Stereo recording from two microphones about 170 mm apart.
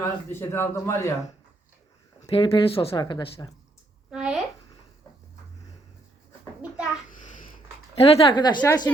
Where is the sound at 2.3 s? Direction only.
30° left (ahead or behind).